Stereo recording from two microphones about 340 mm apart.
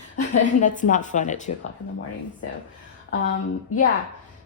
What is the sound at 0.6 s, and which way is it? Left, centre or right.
Speech, left.